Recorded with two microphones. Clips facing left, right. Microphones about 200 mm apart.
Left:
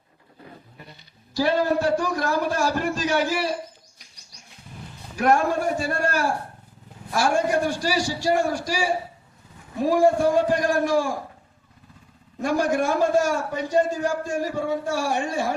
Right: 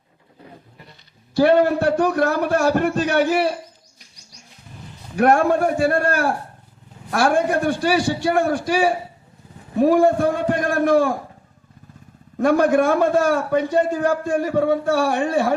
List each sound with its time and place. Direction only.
1.3 s a man's voice: 60° right (ahead or behind)
5.1 s a man's voice: 60° right (ahead or behind)
12.4 s a man's voice: 60° right (ahead or behind)